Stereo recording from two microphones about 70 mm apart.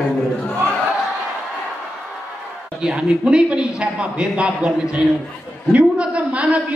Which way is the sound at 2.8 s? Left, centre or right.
Centre.